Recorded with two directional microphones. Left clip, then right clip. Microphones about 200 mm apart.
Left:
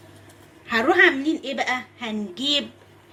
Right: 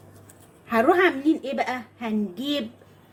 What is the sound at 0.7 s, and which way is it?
A child's voice, 50° right (ahead or behind).